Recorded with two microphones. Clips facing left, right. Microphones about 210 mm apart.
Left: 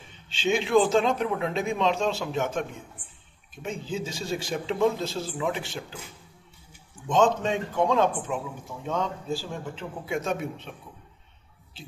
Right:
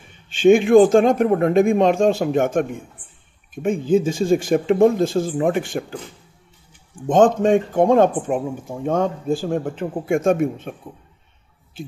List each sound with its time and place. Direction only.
0.3 s speech: 50° right (ahead or behind)
7.1 s speech: 50° right (ahead or behind)